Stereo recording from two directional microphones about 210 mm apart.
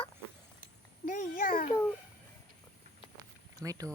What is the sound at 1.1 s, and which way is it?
Speech, 40° left (ahead or behind).